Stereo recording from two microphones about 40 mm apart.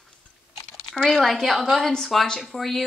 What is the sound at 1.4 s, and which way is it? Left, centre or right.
A woman's voice, centre.